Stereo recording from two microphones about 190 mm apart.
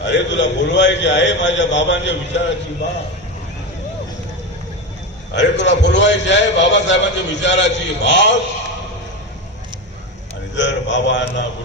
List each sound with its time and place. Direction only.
0.0 s a man's voice: 70° left (ahead or behind)
5.3 s a man's voice: 65° left (ahead or behind)
10.5 s a man's voice: 70° left (ahead or behind)